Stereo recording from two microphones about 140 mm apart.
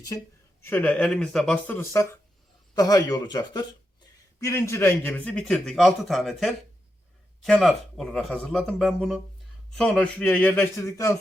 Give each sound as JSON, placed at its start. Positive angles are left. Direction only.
{"t": 0.1, "sound": "speech", "side_deg": 25}
{"t": 0.6, "sound": "a man's voice", "side_deg": 15}